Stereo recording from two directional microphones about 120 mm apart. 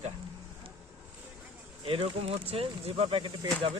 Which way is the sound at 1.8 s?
50° right (ahead or behind).